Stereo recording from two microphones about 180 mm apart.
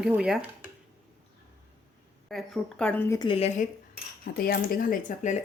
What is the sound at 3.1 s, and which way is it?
Speech, 30° left (ahead or behind).